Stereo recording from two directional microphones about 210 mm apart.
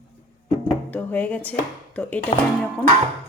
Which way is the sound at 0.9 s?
10° left (ahead or behind).